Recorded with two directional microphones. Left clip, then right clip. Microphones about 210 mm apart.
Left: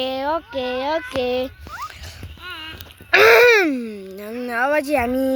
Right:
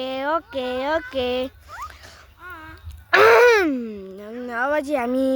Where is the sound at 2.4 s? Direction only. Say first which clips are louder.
Left 5 dB; 35° right (ahead or behind).